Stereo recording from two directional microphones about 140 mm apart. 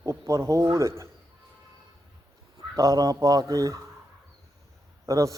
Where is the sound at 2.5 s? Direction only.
25° right (ahead or behind).